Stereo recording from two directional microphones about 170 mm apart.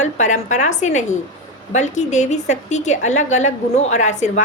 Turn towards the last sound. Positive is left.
turn(degrees=45)  # may be behind; listen again after turning